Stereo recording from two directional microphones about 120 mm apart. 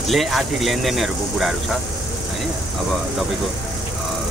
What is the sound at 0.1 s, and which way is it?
Speech, centre (ahead or behind).